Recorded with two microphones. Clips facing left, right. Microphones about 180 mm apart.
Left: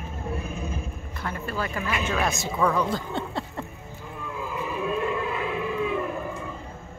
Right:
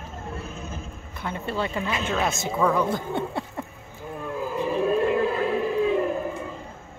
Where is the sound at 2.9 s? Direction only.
15° right (ahead or behind).